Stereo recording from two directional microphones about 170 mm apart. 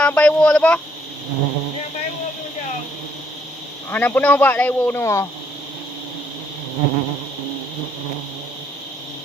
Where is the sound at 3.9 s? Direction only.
10° left (ahead or behind).